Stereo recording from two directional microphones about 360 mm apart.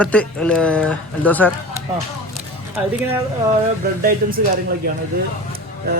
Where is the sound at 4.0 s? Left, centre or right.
Right.